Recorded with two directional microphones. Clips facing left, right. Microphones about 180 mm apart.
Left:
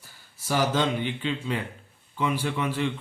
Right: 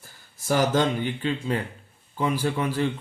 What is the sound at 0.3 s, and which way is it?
Speech, 45° right (ahead or behind).